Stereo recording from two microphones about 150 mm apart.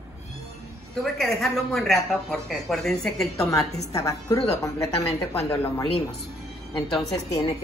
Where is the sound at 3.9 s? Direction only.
20° left (ahead or behind).